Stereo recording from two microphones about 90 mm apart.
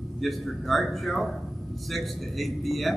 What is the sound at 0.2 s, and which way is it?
A man's voice, centre (ahead or behind).